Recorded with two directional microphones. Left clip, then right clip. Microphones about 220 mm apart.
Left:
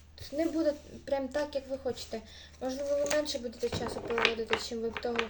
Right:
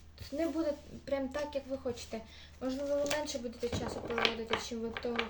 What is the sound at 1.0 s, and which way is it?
A woman's voice, centre (ahead or behind).